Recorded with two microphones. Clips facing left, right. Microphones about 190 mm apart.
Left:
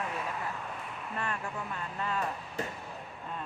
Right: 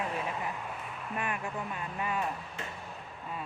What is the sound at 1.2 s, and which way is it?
Speech, 15° right (ahead or behind).